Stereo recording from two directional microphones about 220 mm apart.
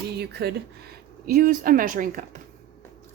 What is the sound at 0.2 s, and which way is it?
A woman's voice, 50° right (ahead or behind).